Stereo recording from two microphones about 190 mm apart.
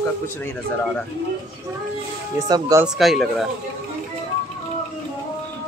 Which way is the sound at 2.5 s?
20° right (ahead or behind).